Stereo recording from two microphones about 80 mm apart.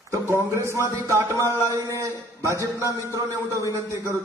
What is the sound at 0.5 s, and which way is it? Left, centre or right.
Speech, right.